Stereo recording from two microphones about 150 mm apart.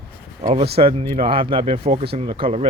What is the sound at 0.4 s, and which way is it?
Speech, 40° right (ahead or behind).